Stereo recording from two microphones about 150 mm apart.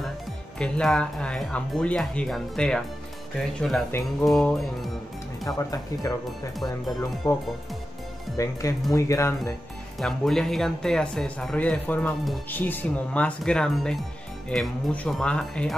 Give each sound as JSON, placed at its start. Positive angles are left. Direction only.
{"t": 0.6, "sound": "speech", "side_deg": 5}
{"t": 5.6, "sound": "speech", "side_deg": 25}
{"t": 7.2, "sound": "speech", "side_deg": 25}
{"t": 9.9, "sound": "speech", "side_deg": 0}